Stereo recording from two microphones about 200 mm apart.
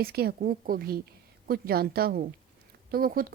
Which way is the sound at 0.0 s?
50° right (ahead or behind).